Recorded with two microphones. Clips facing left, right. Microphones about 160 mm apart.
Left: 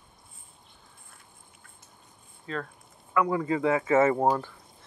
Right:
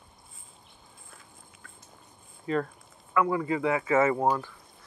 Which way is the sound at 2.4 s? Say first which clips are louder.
Right 6 dB; 10° right (ahead or behind).